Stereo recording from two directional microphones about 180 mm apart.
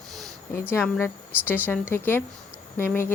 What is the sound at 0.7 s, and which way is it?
Speech, 15° left (ahead or behind).